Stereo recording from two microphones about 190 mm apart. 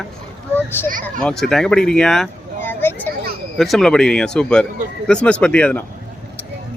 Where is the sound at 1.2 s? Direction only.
5° left (ahead or behind).